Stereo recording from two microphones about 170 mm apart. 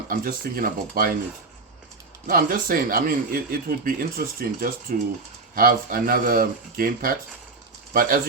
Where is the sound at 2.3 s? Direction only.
55° right (ahead or behind).